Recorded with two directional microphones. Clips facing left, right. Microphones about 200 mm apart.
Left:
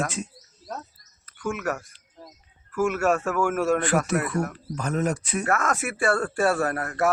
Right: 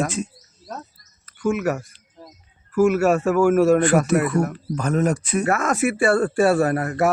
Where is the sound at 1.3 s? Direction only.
5° right (ahead or behind).